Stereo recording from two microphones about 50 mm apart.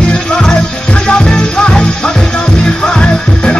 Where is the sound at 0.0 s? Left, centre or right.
Centre.